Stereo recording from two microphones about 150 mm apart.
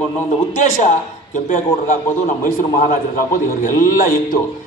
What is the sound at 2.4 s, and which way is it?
A man's voice, 65° left (ahead or behind).